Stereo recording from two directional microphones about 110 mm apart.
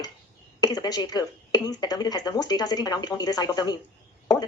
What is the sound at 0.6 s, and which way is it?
Speech, 35° left (ahead or behind).